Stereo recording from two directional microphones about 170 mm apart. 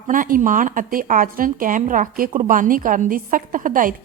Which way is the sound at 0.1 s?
55° right (ahead or behind).